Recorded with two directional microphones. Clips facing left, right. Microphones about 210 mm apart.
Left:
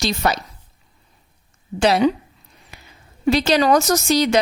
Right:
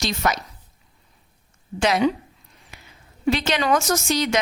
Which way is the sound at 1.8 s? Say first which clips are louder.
Left 4 dB; 35° left (ahead or behind).